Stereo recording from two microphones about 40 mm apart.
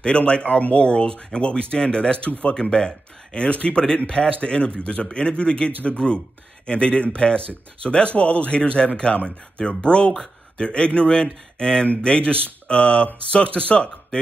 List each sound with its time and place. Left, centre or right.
0.0 s speech: left